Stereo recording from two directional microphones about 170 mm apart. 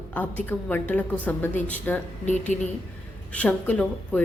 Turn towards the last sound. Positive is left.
turn(degrees=5)  # may be behind; listen again after turning